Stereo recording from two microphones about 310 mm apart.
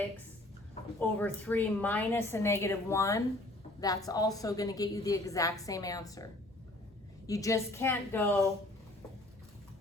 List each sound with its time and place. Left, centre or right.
0.9 s a woman's voice: centre
7.3 s a woman's voice: centre